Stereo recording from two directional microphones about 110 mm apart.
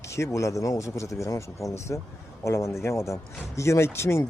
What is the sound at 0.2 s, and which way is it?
Speech, 25° left (ahead or behind).